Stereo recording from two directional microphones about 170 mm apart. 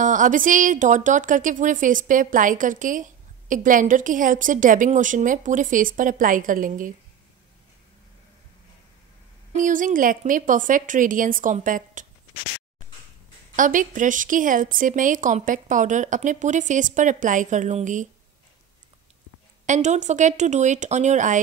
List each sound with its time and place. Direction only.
0.0 s a woman's voice: 50° right (ahead or behind)
9.5 s a woman's voice: 50° right (ahead or behind)
13.6 s a woman's voice: 50° right (ahead or behind)
19.6 s a woman's voice: 45° right (ahead or behind)